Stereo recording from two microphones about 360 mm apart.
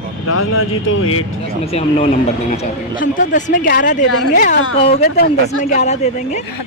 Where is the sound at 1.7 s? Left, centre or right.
Centre.